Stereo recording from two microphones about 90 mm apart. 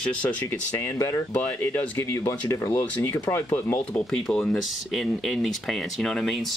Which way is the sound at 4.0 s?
10° left (ahead or behind).